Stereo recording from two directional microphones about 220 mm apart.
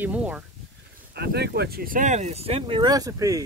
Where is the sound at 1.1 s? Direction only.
45° right (ahead or behind); by 3.4 s 15° right (ahead or behind).